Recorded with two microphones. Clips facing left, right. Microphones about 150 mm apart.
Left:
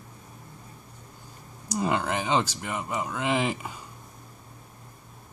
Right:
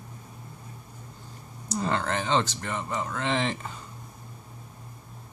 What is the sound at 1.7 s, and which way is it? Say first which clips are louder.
Speech: left 1 dB; 10° left (ahead or behind).